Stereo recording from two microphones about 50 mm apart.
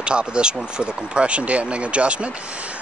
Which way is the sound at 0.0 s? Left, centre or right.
Centre.